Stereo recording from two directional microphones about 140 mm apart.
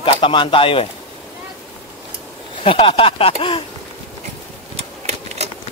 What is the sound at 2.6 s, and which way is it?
Speech, 40° left (ahead or behind).